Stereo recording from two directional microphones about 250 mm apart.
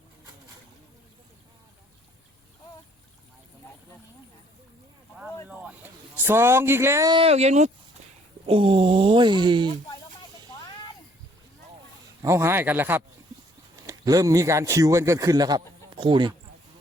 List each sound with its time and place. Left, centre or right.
5.5 s speech: centre
12.2 s a man's voice: centre